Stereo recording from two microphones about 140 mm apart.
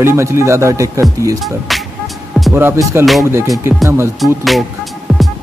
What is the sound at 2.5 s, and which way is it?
Music, 15° right (ahead or behind).